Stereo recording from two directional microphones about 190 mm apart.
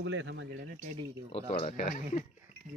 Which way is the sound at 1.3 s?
30° left (ahead or behind).